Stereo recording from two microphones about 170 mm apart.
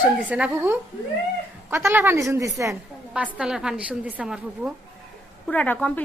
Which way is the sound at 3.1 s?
5° right (ahead or behind).